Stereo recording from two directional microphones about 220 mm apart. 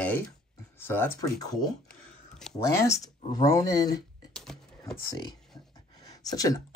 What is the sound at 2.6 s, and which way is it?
Speech, 15° left (ahead or behind).